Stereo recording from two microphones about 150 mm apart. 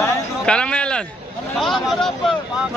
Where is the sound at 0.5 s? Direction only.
5° left (ahead or behind).